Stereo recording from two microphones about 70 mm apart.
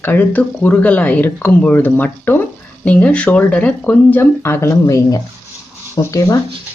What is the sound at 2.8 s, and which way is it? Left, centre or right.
Speech, centre.